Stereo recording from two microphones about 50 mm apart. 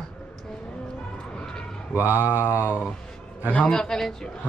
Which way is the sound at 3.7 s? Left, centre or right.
Centre.